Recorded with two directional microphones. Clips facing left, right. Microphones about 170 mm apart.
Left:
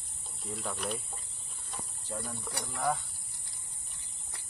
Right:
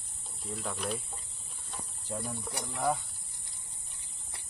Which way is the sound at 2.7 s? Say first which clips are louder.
Right 1 dB; 10° right (ahead or behind).